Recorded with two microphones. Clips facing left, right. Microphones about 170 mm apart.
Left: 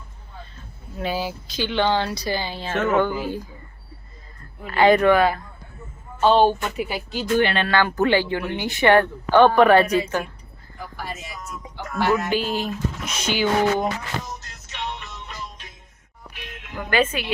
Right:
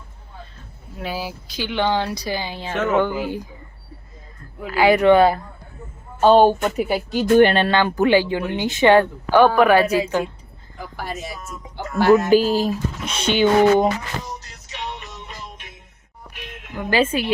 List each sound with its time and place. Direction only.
0.9 s speech: 5° right (ahead or behind)
4.6 s speech: 5° right (ahead or behind)
5.0 s speech: 30° right (ahead or behind)
6.1 s speech: 45° right (ahead or behind)
7.7 s speech: 20° right (ahead or behind); by 10.0 s 5° right (ahead or behind)
11.8 s speech: 30° right (ahead or behind)
14.7 s music: 40° right (ahead or behind)
16.7 s a woman's voice: 30° right (ahead or behind)